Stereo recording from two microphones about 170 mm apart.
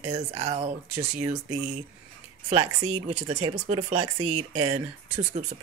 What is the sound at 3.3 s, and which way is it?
Speech, 30° right (ahead or behind).